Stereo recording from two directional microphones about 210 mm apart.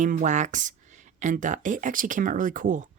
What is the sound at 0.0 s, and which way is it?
A woman's voice, 40° right (ahead or behind).